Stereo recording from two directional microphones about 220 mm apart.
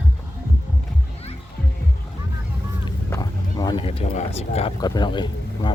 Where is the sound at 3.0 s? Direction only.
15° left (ahead or behind).